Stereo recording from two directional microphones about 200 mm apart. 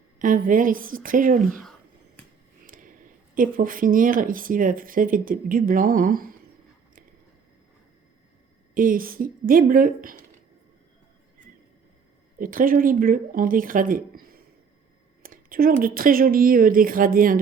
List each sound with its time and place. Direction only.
0.2 s speech: 40° right (ahead or behind)
2.6 s a sound: 45° right (ahead or behind)
3.3 s speech: 45° right (ahead or behind)
8.7 s speech: 45° right (ahead or behind)
12.4 s speech: 45° right (ahead or behind)
15.2 s speech: 45° right (ahead or behind)